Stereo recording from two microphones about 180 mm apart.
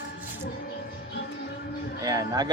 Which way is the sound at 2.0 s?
20° right (ahead or behind).